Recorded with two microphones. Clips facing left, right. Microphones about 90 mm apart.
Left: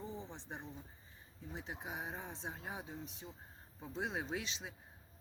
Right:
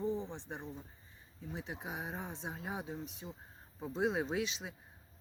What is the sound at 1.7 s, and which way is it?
Speech, 20° right (ahead or behind).